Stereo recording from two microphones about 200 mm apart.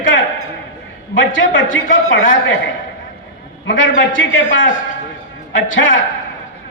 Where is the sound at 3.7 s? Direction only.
65° left (ahead or behind).